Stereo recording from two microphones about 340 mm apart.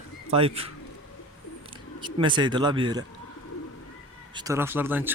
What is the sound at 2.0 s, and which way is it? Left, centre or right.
Speech, centre.